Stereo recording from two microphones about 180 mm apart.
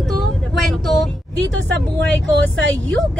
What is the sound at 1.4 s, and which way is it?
Speech, 70° right (ahead or behind).